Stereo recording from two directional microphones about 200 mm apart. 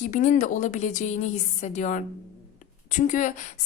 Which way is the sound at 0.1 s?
40° left (ahead or behind).